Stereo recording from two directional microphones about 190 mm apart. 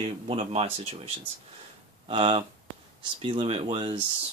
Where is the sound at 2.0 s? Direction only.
30° right (ahead or behind).